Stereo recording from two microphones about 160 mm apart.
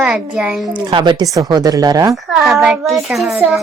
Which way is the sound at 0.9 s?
30° right (ahead or behind).